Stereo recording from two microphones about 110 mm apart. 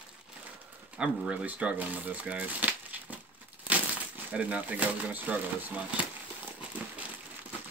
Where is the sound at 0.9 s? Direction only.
5° right (ahead or behind).